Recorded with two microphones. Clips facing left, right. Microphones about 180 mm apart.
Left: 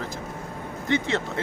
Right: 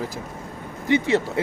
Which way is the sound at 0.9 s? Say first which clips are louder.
Right 5 dB; 10° right (ahead or behind).